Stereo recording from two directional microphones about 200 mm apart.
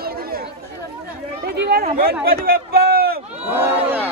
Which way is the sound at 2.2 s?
50° right (ahead or behind).